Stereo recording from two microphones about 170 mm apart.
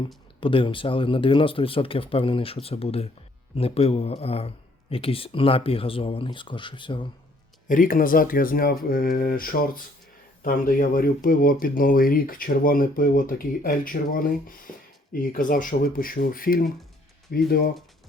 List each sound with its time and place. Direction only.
0.3 s speech: 30° left (ahead or behind)
7.7 s speech: 55° left (ahead or behind)